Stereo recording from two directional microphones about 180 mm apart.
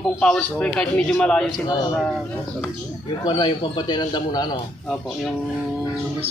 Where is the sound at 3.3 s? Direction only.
25° left (ahead or behind).